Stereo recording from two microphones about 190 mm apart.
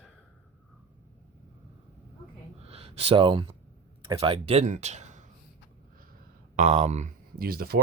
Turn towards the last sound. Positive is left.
turn(degrees=-50)  # may be behind; listen again after turning